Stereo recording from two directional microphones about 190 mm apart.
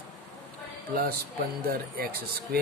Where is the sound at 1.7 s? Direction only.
55° right (ahead or behind).